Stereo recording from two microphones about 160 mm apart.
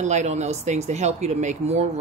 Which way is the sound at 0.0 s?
45° right (ahead or behind).